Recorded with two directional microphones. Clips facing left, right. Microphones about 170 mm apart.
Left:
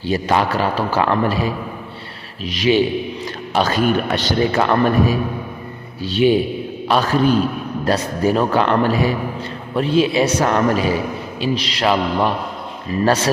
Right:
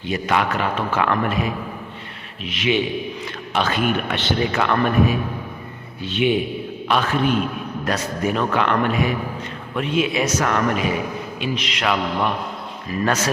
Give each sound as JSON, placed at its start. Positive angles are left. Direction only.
{"t": 0.0, "sound": "a man's voice", "side_deg": 35}